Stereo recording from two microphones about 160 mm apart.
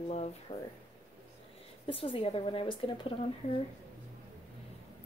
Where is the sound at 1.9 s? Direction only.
35° left (ahead or behind).